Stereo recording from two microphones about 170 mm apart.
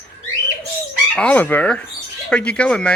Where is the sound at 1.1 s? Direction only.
5° left (ahead or behind).